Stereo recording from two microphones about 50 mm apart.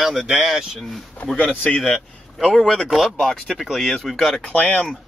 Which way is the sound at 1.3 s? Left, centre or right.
Left.